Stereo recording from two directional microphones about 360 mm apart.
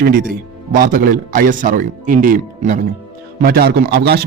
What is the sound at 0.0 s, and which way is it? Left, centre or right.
A man's voice, right.